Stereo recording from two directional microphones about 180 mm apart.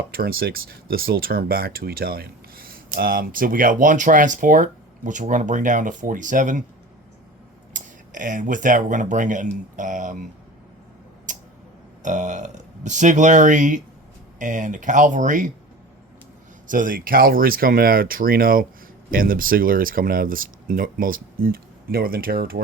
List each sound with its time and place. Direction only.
0.1 s speech: 55° right (ahead or behind)
7.7 s speech: 45° right (ahead or behind)
11.3 s tick: 45° right (ahead or behind)
12.0 s speech: 45° right (ahead or behind)
16.6 s speech: 50° right (ahead or behind)